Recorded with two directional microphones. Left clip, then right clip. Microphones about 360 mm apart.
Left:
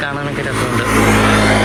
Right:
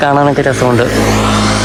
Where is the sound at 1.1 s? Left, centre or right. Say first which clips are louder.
Even; left.